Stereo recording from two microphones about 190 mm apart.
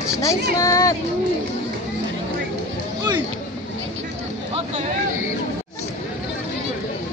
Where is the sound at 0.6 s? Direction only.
15° left (ahead or behind).